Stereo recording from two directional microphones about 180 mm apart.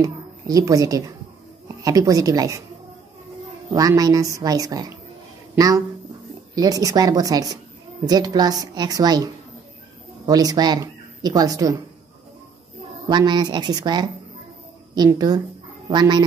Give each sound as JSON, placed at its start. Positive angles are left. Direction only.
{"t": 0.0, "sound": "a woman's voice", "side_deg": -20}
{"t": 3.7, "sound": "speech", "side_deg": -20}
{"t": 6.5, "sound": "speech", "side_deg": -20}
{"t": 13.1, "sound": "speech", "side_deg": -25}